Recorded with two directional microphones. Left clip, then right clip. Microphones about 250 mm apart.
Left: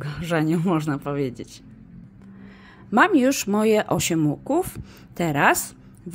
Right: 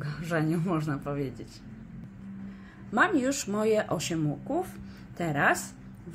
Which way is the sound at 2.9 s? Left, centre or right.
Left.